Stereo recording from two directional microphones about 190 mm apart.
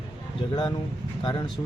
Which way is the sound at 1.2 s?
25° left (ahead or behind).